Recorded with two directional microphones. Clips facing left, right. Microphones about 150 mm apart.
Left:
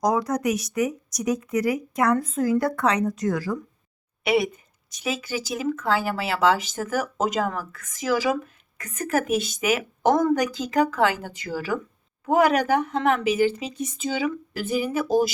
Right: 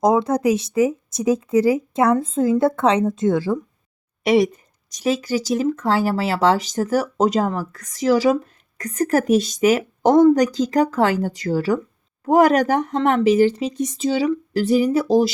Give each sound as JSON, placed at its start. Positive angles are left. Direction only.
{"t": 0.0, "sound": "speech", "side_deg": -25}
{"t": 4.2, "sound": "speech", "side_deg": -35}